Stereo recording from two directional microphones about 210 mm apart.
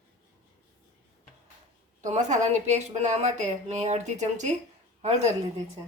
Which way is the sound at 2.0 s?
35° right (ahead or behind).